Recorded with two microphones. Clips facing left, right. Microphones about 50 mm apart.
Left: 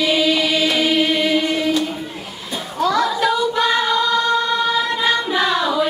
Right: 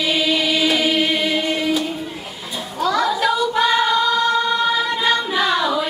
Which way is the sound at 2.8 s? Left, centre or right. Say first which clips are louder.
Left 1 dB; centre.